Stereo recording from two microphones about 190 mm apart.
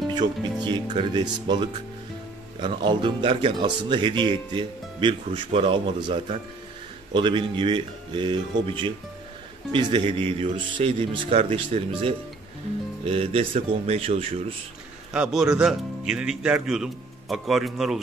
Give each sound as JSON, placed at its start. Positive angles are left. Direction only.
{"t": 0.1, "sound": "speech", "side_deg": -25}
{"t": 2.6, "sound": "speech", "side_deg": -25}
{"t": 15.1, "sound": "a man's voice", "side_deg": -5}